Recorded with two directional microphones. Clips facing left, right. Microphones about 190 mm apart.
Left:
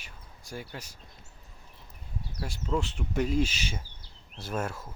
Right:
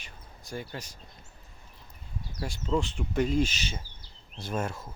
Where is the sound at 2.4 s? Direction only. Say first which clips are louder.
Right 2 dB; 5° left (ahead or behind).